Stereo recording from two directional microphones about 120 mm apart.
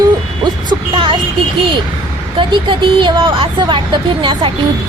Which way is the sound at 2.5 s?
45° right (ahead or behind).